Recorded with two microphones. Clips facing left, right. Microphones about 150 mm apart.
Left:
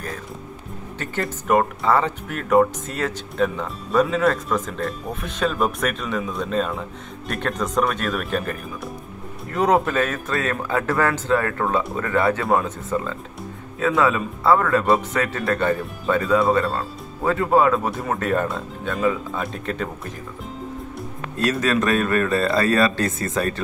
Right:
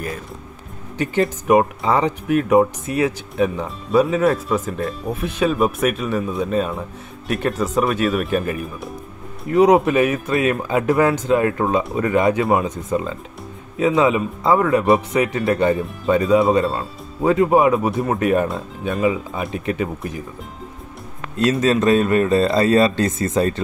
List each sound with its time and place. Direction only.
0.9 s speech: 15° right (ahead or behind)
21.4 s speech: 25° right (ahead or behind)